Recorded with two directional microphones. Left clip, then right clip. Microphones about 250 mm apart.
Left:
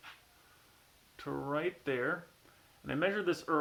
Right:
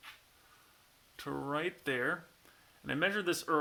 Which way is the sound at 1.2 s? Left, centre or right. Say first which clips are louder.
Even; right.